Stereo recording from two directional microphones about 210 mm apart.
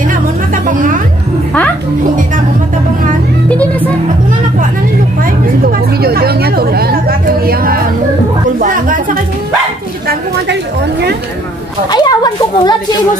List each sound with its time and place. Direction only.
0.7 s music: 40° right (ahead or behind)
3.4 s music: 5° left (ahead or behind)
5.6 s chatter: 45° right (ahead or behind)
10.0 s chatter: 50° right (ahead or behind)
11.9 s a sound: 20° left (ahead or behind)